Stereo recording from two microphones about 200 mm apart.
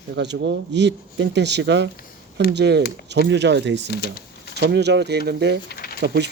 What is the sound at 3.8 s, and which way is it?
Speech, 50° left (ahead or behind).